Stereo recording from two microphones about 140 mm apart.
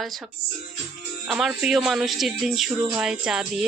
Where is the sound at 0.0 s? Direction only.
Centre (ahead or behind).